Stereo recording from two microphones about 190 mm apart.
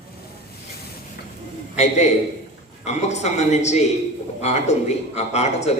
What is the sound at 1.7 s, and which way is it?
A man's voice, 35° left (ahead or behind).